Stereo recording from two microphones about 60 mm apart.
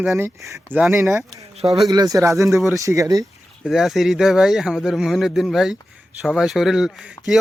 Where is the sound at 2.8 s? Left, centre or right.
Right.